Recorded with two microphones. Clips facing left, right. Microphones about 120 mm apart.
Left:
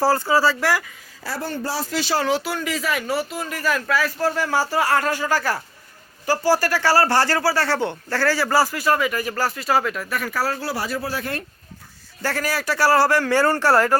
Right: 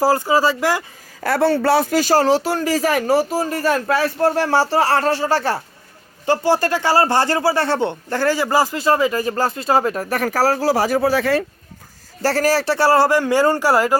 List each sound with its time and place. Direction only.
0.0 s speech: 15° right (ahead or behind)
1.2 s speech: 65° right (ahead or behind); by 9.9 s 25° right (ahead or behind)
9.9 s speech: 40° right (ahead or behind)
10.6 s speech: 90° right
12.2 s speech: 35° right (ahead or behind); by 14.0 s 15° right (ahead or behind)